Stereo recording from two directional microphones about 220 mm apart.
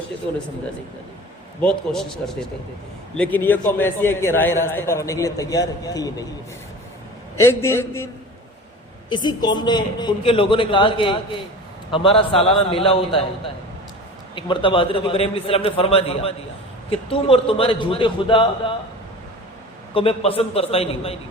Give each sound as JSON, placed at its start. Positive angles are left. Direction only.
{"t": 1.6, "sound": "a man's voice", "side_deg": 0}
{"t": 7.3, "sound": "a man's voice", "side_deg": 10}
{"t": 14.3, "sound": "a man's voice", "side_deg": 20}
{"t": 19.9, "sound": "a man's voice", "side_deg": 25}